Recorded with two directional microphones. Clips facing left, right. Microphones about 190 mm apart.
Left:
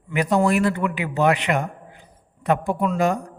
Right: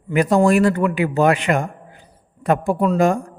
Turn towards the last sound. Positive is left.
turn(degrees=-45)  # may be behind; listen again after turning